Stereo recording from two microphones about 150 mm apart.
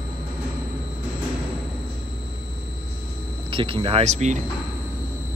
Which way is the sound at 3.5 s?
35° right (ahead or behind).